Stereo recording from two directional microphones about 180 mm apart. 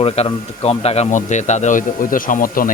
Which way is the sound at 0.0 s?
35° left (ahead or behind).